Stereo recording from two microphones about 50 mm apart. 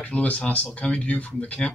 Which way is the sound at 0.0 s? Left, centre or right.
Left.